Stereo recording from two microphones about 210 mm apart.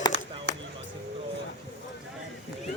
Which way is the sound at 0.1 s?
55° right (ahead or behind).